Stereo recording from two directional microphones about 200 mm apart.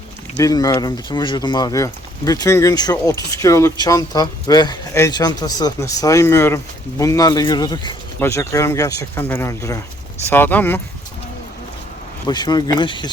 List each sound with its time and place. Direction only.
0.3 s speech: 20° left (ahead or behind)
12.3 s speech: 20° left (ahead or behind)